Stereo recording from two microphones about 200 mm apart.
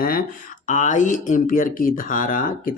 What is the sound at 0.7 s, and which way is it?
Speech, 40° left (ahead or behind).